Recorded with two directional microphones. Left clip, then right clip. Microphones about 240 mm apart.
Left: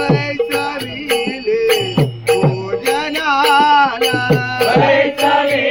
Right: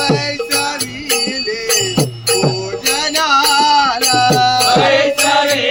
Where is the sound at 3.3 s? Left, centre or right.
Right.